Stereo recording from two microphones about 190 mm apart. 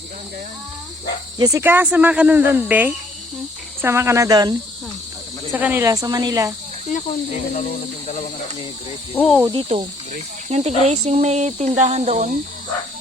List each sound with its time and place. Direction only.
1.4 s speech: 15° right (ahead or behind)
5.5 s speech: 10° right (ahead or behind)
7.6 s speech: 40° left (ahead or behind)
9.1 s cricket: 5° left (ahead or behind)
9.4 s speech: 25° right (ahead or behind)